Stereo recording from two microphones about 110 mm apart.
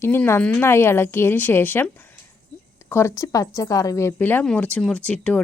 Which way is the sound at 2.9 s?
25° left (ahead or behind).